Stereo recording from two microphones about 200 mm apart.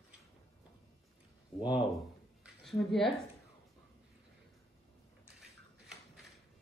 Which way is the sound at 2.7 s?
Centre (ahead or behind).